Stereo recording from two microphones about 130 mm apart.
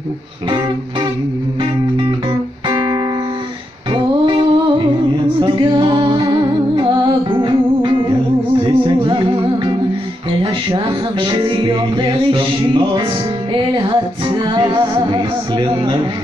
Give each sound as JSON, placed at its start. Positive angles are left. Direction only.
{"t": 1.6, "sound": "music", "side_deg": -35}